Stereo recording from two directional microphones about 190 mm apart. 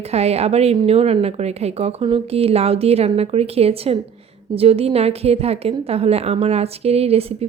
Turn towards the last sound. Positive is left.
turn(degrees=-30)  # may be behind; listen again after turning